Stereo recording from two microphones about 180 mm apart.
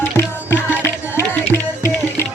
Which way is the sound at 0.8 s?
10° left (ahead or behind).